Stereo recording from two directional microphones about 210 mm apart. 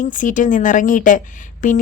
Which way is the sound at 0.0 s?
35° left (ahead or behind).